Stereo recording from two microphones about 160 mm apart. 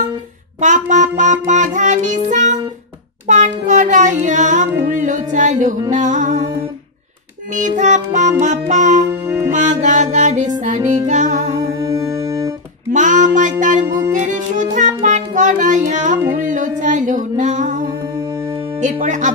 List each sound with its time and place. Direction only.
0.6 s music: 50° right (ahead or behind)
3.3 s child singing: 50° right (ahead or behind)
4.8 s music: 55° right (ahead or behind)
7.5 s music: 50° right (ahead or behind)
9.2 s music: 15° right (ahead or behind)
9.5 s music: 50° right (ahead or behind)
11.8 s music: 25° right (ahead or behind)
12.9 s music: 50° right (ahead or behind)
18.8 s speech: 50° right (ahead or behind)